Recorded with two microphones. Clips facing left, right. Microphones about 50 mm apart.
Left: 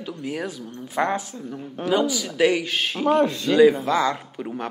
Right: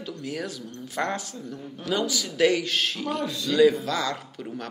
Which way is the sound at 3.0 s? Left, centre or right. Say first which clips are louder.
Left 9 dB; left.